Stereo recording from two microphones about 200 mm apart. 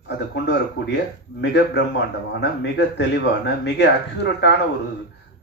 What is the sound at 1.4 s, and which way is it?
A man's voice, 60° left (ahead or behind).